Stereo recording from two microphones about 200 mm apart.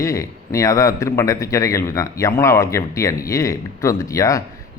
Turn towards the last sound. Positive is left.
turn(degrees=15)  # may be behind; listen again after turning